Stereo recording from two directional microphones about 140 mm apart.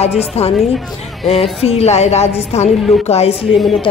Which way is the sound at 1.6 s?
50° left (ahead or behind).